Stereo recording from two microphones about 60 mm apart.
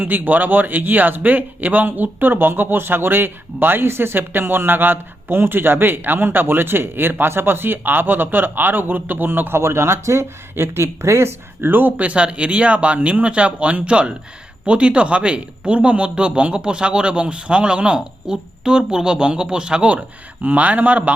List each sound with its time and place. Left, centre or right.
0.0 s speech: right